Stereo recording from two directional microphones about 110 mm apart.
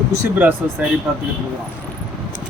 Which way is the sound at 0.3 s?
15° right (ahead or behind).